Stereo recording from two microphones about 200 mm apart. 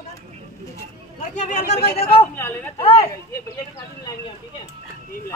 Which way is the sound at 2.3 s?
10° left (ahead or behind).